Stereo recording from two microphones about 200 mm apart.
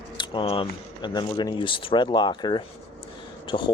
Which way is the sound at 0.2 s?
25° left (ahead or behind).